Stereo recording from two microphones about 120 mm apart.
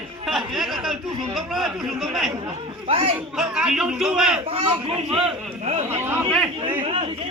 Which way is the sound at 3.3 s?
5° right (ahead or behind).